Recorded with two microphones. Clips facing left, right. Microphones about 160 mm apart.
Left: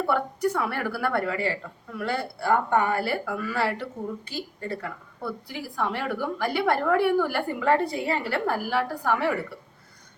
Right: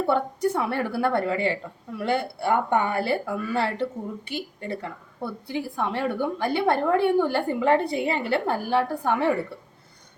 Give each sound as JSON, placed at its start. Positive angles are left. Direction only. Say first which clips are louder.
{"t": 0.0, "sound": "a woman's voice", "louder": "right 2 dB", "side_deg": -25}